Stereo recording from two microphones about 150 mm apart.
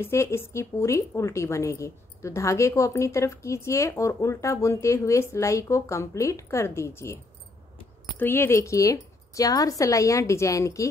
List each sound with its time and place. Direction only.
0.0 s a woman's voice: 20° left (ahead or behind)
8.2 s a woman's voice: 15° left (ahead or behind)